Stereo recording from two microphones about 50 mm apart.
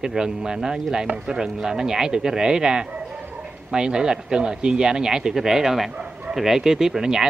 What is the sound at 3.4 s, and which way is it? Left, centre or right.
Speech, centre.